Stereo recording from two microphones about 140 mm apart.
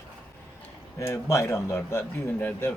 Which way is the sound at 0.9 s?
20° left (ahead or behind).